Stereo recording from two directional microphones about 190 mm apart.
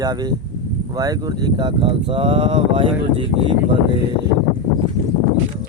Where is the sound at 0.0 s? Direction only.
20° right (ahead or behind).